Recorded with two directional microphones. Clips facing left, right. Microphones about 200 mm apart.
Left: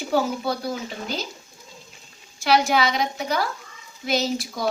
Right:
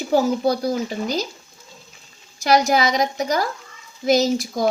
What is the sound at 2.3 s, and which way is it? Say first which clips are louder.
A woman's voice: right 3 dB; 40° right (ahead or behind).